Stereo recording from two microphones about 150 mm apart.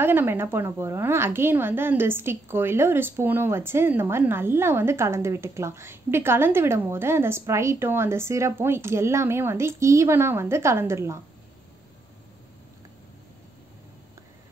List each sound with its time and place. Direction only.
0.0 s a woman's voice: 15° right (ahead or behind)